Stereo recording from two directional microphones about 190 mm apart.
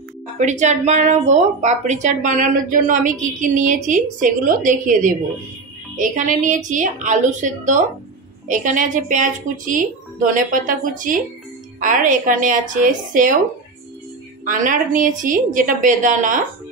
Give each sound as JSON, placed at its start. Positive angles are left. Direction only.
{"t": 0.4, "sound": "a woman's voice", "side_deg": -40}
{"t": 14.4, "sound": "speech", "side_deg": -45}